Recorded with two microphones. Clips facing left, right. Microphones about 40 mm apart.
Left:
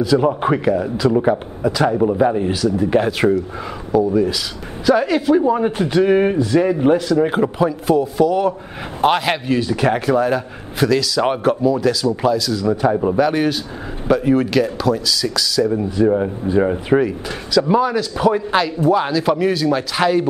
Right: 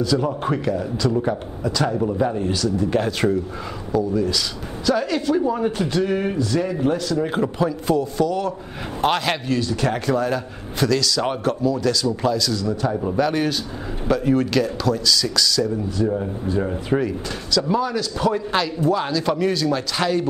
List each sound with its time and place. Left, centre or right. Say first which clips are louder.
0.0 s a man's voice: left 5 dB; centre
7.2 s a man's voice: left 4 dB; centre
12.6 s a man's voice: left 6 dB; left
13.2 s a man's voice: left 4 dB; centre
15.7 s a man's voice: left 6 dB; left
17.0 s a man's voice: left 4 dB; centre